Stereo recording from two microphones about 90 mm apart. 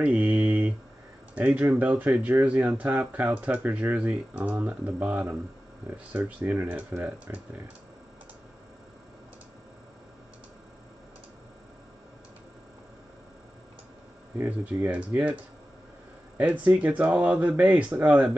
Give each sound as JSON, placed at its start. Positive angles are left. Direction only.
{"t": 0.0, "sound": "mantra", "side_deg": -15}
{"t": 1.3, "sound": "speech", "side_deg": -15}
{"t": 14.4, "sound": "speech", "side_deg": -20}
{"t": 16.3, "sound": "speech", "side_deg": -15}